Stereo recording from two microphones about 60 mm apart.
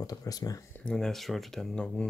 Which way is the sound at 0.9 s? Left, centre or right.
Centre.